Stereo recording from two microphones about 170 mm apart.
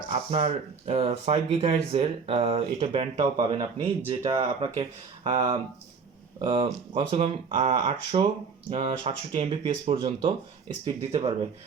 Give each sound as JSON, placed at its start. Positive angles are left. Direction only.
{"t": 0.1, "sound": "speech", "side_deg": -40}
{"t": 3.4, "sound": "speech", "side_deg": -25}
{"t": 6.4, "sound": "speech", "side_deg": -25}
{"t": 7.2, "sound": "speech", "side_deg": -45}